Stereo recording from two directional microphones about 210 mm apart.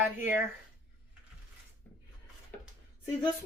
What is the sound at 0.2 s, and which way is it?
Speech, 10° right (ahead or behind).